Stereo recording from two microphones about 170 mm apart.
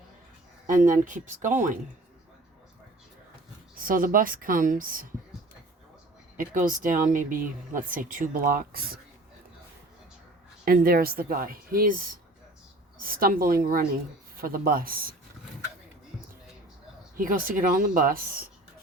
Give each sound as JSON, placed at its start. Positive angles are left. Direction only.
{"t": 0.7, "sound": "speech", "side_deg": -50}
{"t": 3.8, "sound": "speech", "side_deg": -55}
{"t": 6.3, "sound": "speech", "side_deg": -50}
{"t": 10.7, "sound": "a woman's voice", "side_deg": -60}
{"t": 13.0, "sound": "a woman's voice", "side_deg": -55}
{"t": 17.2, "sound": "a woman's voice", "side_deg": -55}